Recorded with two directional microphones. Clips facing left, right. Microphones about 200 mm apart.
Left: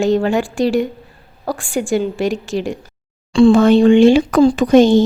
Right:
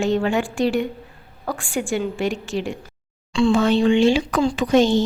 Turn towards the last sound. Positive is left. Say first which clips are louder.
# left 7 dB
turn(degrees=50)  # may be behind; listen again after turning